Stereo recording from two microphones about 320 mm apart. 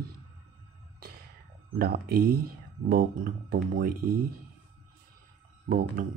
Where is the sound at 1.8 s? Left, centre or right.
Right.